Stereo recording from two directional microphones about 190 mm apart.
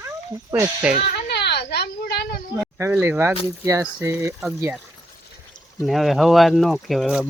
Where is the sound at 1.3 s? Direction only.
60° left (ahead or behind).